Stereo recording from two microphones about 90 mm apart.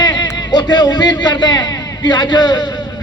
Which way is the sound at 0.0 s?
50° left (ahead or behind).